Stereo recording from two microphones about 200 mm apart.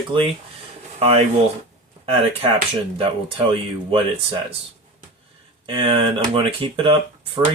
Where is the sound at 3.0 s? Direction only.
25° right (ahead or behind).